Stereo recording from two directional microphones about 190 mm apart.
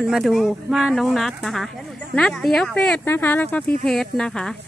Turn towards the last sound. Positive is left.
turn(degrees=5)  # may be behind; listen again after turning